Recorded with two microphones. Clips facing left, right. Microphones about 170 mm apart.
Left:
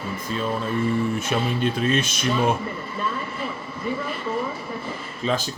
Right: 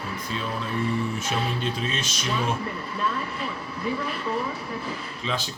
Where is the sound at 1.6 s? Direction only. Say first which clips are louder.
Left 7 dB; 55° left (ahead or behind).